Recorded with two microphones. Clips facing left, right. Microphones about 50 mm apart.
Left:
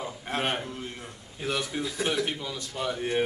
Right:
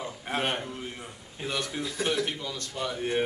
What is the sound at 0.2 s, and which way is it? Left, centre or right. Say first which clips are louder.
A man's voice: even; centre.